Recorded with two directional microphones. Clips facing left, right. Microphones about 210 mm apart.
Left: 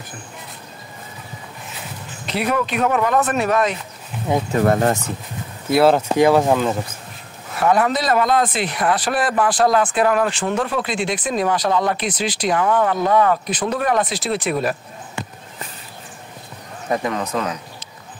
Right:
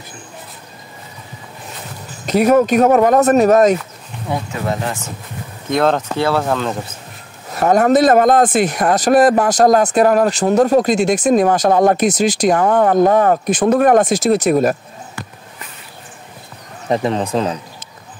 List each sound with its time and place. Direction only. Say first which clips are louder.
2.2 s speech: right 9 dB; 45° right (ahead or behind)
4.5 s speech: left 5 dB; 50° left (ahead or behind)
5.7 s speech: left 1 dB; 5° left (ahead or behind)
7.5 s speech: right 6 dB; 40° right (ahead or behind)
16.9 s speech: right 5 dB; 30° right (ahead or behind)